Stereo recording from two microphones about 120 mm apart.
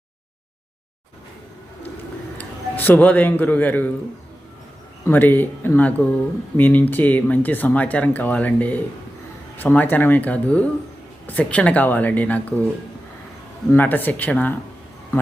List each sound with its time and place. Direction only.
2.4 s a man's voice: 15° left (ahead or behind)
5.0 s speech: 15° left (ahead or behind)
13.7 s speech: 15° left (ahead or behind)